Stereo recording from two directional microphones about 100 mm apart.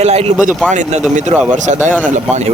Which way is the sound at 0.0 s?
90° right.